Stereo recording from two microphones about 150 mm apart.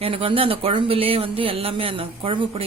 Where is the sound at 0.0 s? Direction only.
40° right (ahead or behind).